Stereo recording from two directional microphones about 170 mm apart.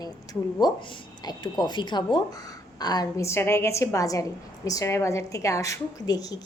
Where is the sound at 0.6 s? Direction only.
25° left (ahead or behind).